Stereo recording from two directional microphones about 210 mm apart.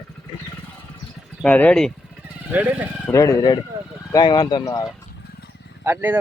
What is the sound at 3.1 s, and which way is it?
Speech, 15° left (ahead or behind).